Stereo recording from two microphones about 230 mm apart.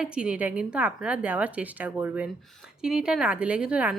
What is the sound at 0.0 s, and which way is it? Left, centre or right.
A woman's voice, centre.